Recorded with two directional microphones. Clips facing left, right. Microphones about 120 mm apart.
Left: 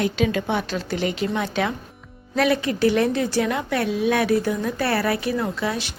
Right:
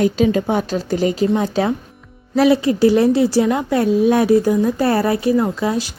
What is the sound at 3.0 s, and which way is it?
Speech, 15° right (ahead or behind).